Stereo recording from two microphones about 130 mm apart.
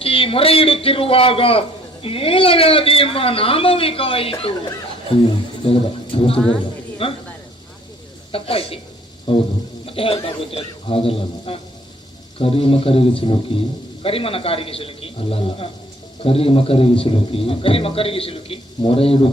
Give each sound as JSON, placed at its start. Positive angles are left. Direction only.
{"t": 0.0, "sound": "a man's voice", "side_deg": 45}
{"t": 5.6, "sound": "a man's voice", "side_deg": 45}
{"t": 8.3, "sound": "a man's voice", "side_deg": 45}
{"t": 9.3, "sound": "a sound", "side_deg": 40}
{"t": 9.8, "sound": "sheep", "side_deg": 45}
{"t": 10.5, "sound": "a man's voice", "side_deg": 45}